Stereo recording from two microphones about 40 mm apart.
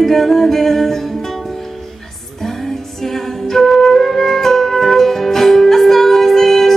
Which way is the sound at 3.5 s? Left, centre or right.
Centre.